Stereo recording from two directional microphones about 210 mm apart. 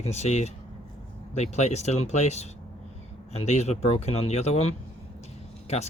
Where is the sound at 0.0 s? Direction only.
30° left (ahead or behind).